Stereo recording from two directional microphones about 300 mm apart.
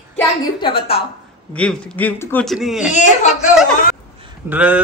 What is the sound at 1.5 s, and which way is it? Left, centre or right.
A woman's voice, centre.